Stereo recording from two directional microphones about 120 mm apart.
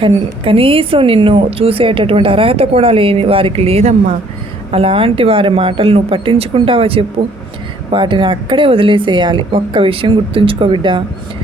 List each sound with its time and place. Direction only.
0.0 s a woman's voice: 50° right (ahead or behind)